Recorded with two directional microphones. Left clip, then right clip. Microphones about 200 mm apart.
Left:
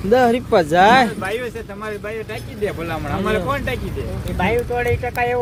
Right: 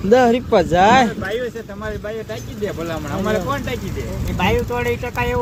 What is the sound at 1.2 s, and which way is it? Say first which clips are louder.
Speech: right 1 dB; 20° left (ahead or behind).